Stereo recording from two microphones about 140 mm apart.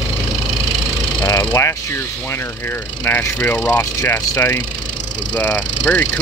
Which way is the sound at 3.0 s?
15° left (ahead or behind).